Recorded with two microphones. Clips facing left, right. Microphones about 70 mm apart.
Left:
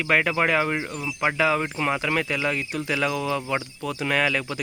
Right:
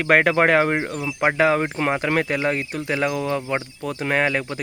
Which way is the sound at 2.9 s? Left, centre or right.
Right.